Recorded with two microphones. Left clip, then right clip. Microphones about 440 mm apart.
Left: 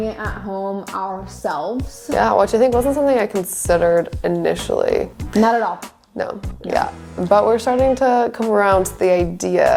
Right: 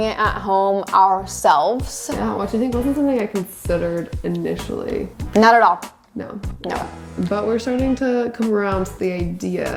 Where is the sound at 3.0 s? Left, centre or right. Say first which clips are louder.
Left 4 dB; left.